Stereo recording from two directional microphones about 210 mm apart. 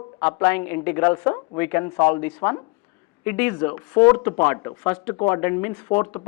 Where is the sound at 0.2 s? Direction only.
10° left (ahead or behind).